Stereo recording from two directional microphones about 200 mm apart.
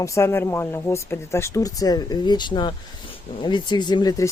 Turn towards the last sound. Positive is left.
turn(degrees=20)  # may be behind; listen again after turning